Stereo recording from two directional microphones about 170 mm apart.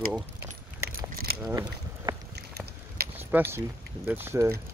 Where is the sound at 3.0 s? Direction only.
65° right (ahead or behind).